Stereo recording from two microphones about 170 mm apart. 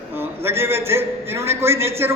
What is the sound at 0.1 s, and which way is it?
A man's voice, 15° right (ahead or behind).